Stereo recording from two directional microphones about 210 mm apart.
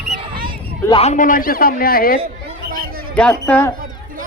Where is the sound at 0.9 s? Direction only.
30° left (ahead or behind); by 2.1 s 45° left (ahead or behind).